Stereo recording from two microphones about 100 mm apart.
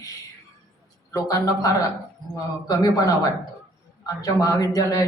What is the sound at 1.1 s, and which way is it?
Speech, 35° left (ahead or behind).